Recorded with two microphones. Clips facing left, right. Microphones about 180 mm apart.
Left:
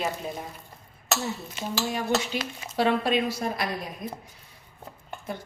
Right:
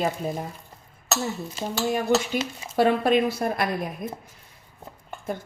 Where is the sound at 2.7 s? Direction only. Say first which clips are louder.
Right 4 dB; 50° right (ahead or behind).